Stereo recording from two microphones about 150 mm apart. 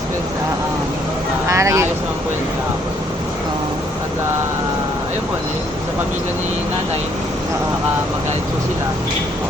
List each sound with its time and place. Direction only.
1.5 s speech: 20° right (ahead or behind)